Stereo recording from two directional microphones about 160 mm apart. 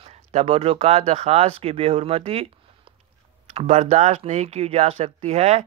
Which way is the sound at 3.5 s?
40° right (ahead or behind).